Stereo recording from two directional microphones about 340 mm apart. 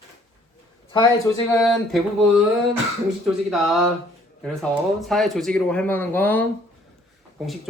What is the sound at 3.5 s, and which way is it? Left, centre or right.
Speech, centre.